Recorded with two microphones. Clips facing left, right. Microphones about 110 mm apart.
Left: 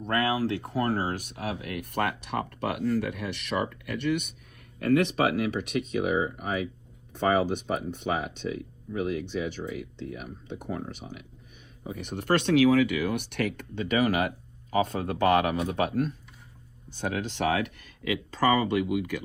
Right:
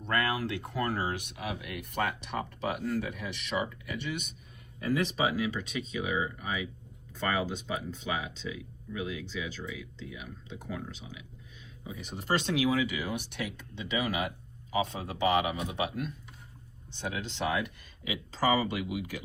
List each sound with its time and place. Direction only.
0.1 s speech: 35° left (ahead or behind); by 19.2 s 60° left (ahead or behind)